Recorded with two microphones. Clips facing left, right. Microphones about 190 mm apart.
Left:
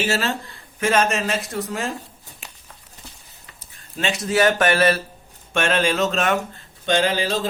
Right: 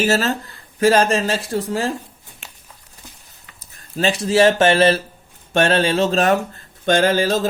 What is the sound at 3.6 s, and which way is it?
Speech, 35° right (ahead or behind).